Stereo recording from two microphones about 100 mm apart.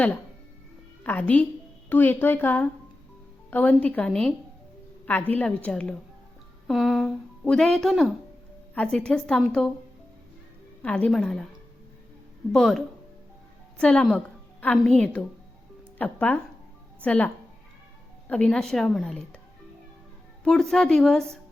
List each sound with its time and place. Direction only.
1.0 s a woman's voice: 15° left (ahead or behind)
5.3 s a woman's voice: 15° left (ahead or behind); by 8.1 s centre (ahead or behind)
8.7 s a woman's voice: 10° left (ahead or behind)
10.8 s a woman's voice: 10° left (ahead or behind)
12.5 s a woman's voice: centre (ahead or behind)
20.4 s a woman's voice: 5° left (ahead or behind)